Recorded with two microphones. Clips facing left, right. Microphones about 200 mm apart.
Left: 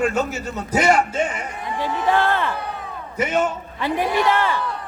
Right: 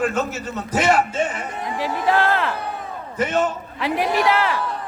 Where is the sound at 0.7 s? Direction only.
5° right (ahead or behind).